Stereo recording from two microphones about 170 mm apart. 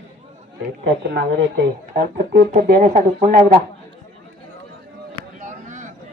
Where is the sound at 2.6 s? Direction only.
65° right (ahead or behind).